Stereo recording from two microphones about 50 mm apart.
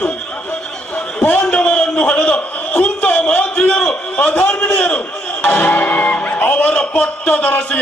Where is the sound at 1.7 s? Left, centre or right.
Left.